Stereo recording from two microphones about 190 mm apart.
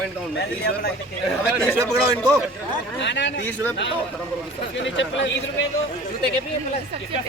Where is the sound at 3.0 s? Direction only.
65° left (ahead or behind).